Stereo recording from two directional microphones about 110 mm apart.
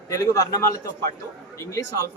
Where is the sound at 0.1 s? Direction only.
30° left (ahead or behind).